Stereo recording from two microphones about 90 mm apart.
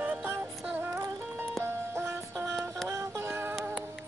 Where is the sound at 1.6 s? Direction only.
30° right (ahead or behind).